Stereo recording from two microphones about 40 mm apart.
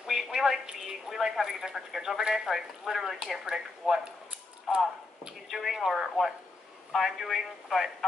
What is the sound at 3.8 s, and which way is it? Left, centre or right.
Speech, centre.